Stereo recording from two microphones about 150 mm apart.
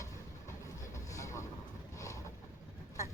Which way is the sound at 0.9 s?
20° left (ahead or behind).